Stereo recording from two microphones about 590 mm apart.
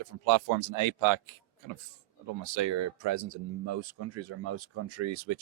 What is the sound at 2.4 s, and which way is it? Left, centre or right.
Speech, right.